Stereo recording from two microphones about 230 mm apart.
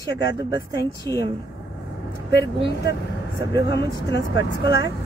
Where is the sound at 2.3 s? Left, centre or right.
Left.